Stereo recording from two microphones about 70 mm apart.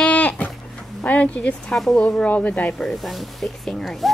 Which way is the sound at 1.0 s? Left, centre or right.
Left.